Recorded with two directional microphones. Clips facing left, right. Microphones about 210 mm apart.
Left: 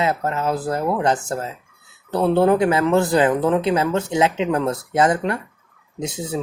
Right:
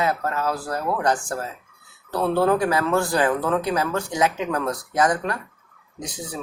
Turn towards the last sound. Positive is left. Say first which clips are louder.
# left 7 dB
turn(degrees=25)  # may be behind; listen again after turning